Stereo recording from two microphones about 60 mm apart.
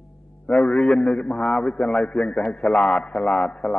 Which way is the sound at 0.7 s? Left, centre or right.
Centre.